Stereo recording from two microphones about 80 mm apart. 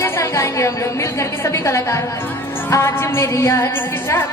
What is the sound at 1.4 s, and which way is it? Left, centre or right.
Music, left.